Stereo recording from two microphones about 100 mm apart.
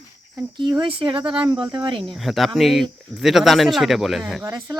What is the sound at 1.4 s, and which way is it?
Speech, 50° right (ahead or behind).